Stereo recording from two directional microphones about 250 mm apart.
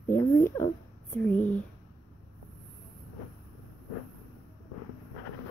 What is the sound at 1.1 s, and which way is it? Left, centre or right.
Speech, centre.